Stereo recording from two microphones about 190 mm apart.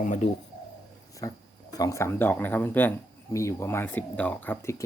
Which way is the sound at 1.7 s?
15° left (ahead or behind).